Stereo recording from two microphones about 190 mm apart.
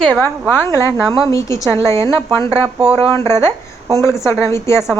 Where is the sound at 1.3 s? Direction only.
15° left (ahead or behind).